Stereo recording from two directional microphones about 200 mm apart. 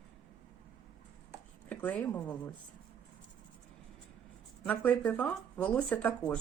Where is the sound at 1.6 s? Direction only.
10° left (ahead or behind).